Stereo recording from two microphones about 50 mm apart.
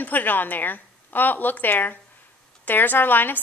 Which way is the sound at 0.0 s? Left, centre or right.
Left.